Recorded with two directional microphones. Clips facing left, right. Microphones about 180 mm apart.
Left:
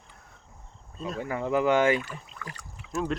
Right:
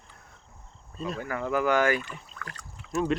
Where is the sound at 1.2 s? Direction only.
25° left (ahead or behind).